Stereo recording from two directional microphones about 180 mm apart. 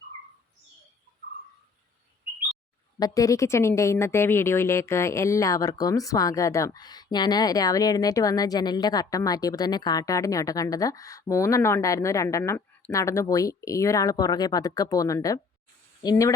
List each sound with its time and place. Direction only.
3.0 s speech: 20° left (ahead or behind)